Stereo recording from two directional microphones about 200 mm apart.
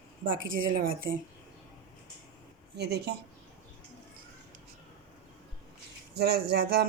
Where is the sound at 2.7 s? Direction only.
55° right (ahead or behind).